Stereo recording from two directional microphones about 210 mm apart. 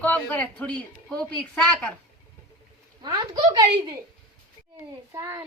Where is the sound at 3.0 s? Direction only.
20° right (ahead or behind).